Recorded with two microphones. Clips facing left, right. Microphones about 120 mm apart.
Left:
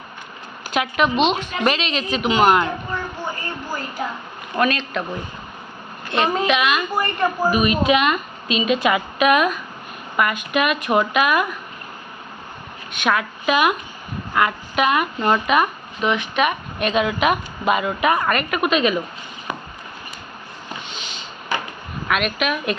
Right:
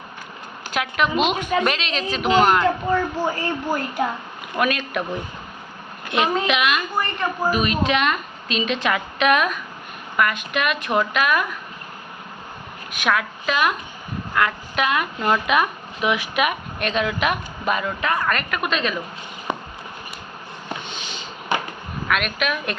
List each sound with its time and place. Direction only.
0.7 s speech: centre (ahead or behind)
2.9 s speech: 90° right
4.5 s speech: 5° right (ahead or behind)
6.1 s a woman's voice: 5° right (ahead or behind)
12.9 s speech: centre (ahead or behind)
19.5 s chop: 25° right (ahead or behind)
22.1 s speech: centre (ahead or behind)